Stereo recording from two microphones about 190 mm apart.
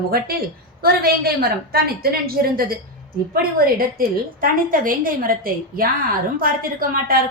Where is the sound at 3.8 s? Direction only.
50° right (ahead or behind).